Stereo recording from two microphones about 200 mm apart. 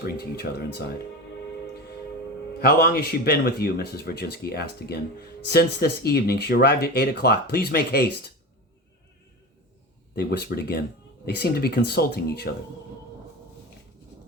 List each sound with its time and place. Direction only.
0.0 s speech: 55° left (ahead or behind)
2.6 s speech: 45° left (ahead or behind)
10.2 s speech: 50° left (ahead or behind)